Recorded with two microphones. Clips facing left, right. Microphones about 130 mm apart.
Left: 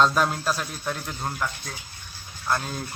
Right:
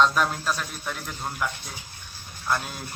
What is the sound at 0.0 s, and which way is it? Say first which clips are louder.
Speech: left 1 dB; centre (ahead or behind).